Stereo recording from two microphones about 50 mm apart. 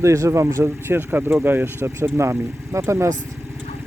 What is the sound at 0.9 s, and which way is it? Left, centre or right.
Speech, right.